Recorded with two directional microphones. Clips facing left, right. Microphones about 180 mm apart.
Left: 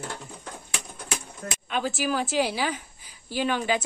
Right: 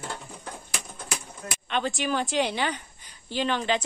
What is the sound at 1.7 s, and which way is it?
A woman's voice, 5° left (ahead or behind).